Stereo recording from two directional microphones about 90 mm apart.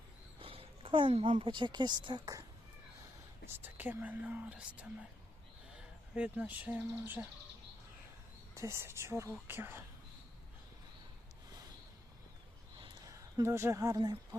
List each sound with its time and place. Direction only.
0.3 s speech: 90° right; by 2.4 s 45° right (ahead or behind)
3.4 s speech: 20° right (ahead or behind)
6.1 s speech: 15° right (ahead or behind)
8.5 s a woman's voice: 30° right (ahead or behind)
13.1 s speech: 35° right (ahead or behind)